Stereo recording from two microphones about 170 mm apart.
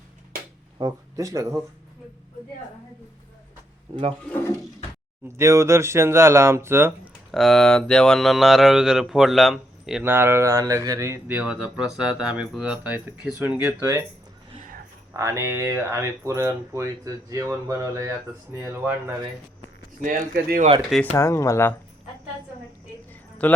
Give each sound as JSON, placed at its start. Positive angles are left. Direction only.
{"t": 0.8, "sound": "speech", "side_deg": -20}
{"t": 3.9, "sound": "speech", "side_deg": -35}
{"t": 5.4, "sound": "speech", "side_deg": -15}
{"t": 7.3, "sound": "speech", "side_deg": 0}
{"t": 10.0, "sound": "speech", "side_deg": -15}
{"t": 15.1, "sound": "speech", "side_deg": -15}
{"t": 20.0, "sound": "speech", "side_deg": -55}
{"t": 20.9, "sound": "speech", "side_deg": 10}
{"t": 23.4, "sound": "speech", "side_deg": 10}